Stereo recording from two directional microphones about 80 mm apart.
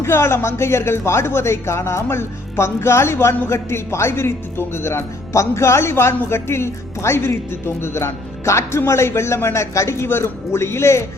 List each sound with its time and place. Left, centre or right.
0.0 s speech: left